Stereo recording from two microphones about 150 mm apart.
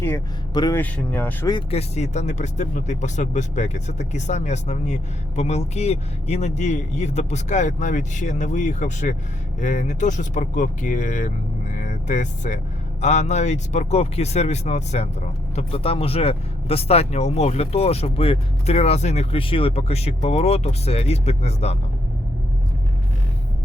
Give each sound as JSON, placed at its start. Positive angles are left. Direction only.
{"t": 0.5, "sound": "a man's voice", "side_deg": 25}
{"t": 0.8, "sound": "speech", "side_deg": 10}
{"t": 1.7, "sound": "speech", "side_deg": 50}